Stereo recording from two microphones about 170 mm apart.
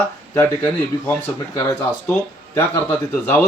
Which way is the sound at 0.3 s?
15° left (ahead or behind).